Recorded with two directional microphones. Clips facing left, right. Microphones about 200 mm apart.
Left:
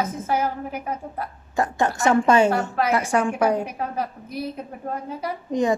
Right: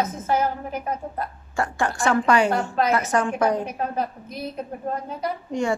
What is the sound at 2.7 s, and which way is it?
A woman's voice, 10° left (ahead or behind).